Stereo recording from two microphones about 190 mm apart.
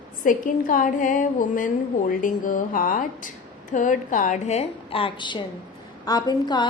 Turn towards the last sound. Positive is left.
turn(degrees=25)  # may be behind; listen again after turning